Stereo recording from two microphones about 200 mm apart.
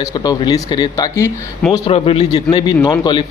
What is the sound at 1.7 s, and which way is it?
Speech, 30° left (ahead or behind).